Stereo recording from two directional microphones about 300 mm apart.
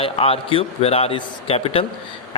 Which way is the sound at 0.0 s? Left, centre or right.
Centre.